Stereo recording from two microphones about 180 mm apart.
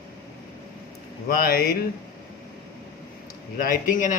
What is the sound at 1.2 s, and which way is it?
Speech, 55° left (ahead or behind).